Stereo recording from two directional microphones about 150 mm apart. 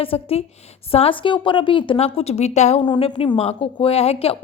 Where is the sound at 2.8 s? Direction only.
30° left (ahead or behind).